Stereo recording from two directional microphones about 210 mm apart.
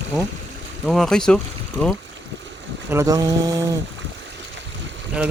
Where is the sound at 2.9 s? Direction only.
15° right (ahead or behind).